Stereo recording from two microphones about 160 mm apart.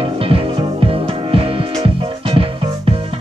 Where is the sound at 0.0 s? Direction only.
35° right (ahead or behind).